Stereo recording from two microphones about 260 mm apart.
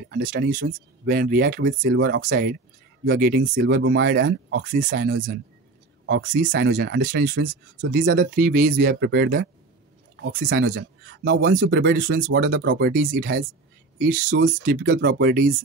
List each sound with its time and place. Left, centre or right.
0.1 s speech: right